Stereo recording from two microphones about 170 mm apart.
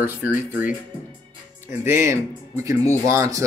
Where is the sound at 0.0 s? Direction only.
10° right (ahead or behind).